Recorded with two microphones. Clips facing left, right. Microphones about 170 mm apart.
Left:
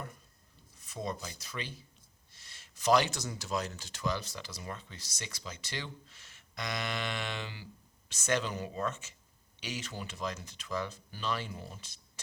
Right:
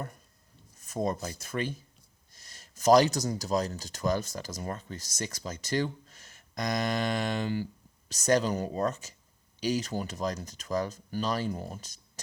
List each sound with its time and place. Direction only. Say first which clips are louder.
0.8 s speech: right 7 dB; 45° right (ahead or behind)